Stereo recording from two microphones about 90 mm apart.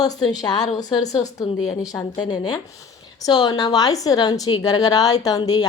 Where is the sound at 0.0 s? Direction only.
50° left (ahead or behind).